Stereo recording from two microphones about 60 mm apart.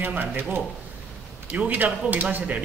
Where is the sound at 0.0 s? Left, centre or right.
Right.